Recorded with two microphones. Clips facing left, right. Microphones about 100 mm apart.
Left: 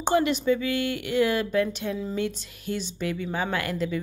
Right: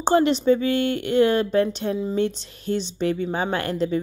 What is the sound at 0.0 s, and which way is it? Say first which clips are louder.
A woman's voice: right 4 dB; 30° right (ahead or behind).